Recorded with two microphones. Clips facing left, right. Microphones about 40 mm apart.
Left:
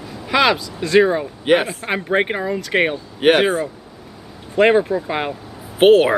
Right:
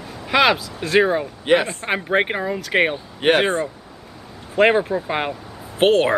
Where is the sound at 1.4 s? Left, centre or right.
Centre.